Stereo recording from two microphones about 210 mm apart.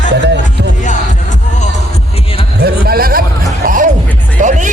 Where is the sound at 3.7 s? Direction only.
40° right (ahead or behind).